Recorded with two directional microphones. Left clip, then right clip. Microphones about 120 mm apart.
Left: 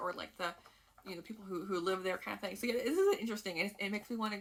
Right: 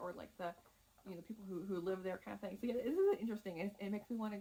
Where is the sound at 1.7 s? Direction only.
10° left (ahead or behind).